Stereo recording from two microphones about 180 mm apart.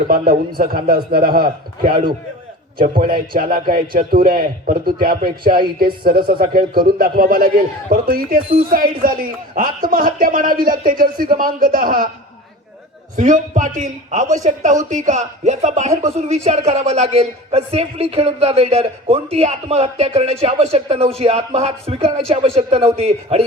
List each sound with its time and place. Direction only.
0.1 s a man's voice: 50° right (ahead or behind)
3.0 s a man's voice: 50° right (ahead or behind)
13.1 s a man's voice: 45° right (ahead or behind)